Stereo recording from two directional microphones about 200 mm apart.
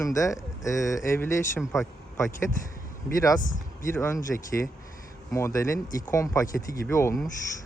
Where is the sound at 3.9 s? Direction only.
15° left (ahead or behind).